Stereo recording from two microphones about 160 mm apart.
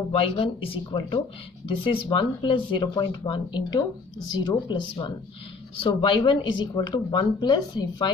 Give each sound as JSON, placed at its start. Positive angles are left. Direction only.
{"t": 0.1, "sound": "speech", "side_deg": 35}